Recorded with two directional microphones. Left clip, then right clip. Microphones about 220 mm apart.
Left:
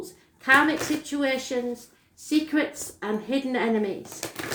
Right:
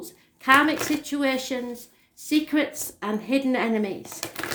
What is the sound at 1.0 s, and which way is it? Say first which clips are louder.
A woman's voice: right 1 dB; 40° right (ahead or behind).